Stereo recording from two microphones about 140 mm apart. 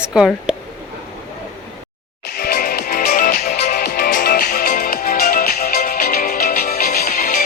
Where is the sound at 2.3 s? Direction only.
90° left.